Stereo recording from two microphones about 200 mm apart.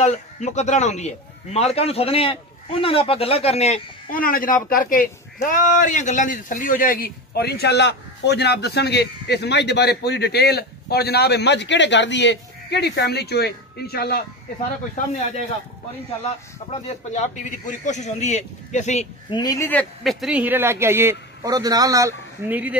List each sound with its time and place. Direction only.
0.0 s a man's voice: 35° left (ahead or behind); by 14.2 s 50° left (ahead or behind)
16.7 s a man's voice: 35° left (ahead or behind)
19.3 s a man's voice: 20° left (ahead or behind); by 22.8 s 10° right (ahead or behind)